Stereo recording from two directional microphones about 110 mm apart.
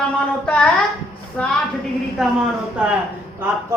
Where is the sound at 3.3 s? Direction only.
20° right (ahead or behind).